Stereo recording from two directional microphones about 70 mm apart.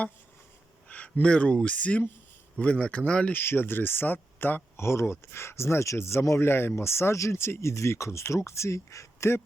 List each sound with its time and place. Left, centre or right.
0.9 s speech: centre
3.3 s speech: left